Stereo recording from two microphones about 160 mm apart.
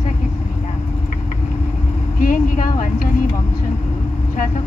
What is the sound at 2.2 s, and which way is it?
Vehicle, 60° left (ahead or behind).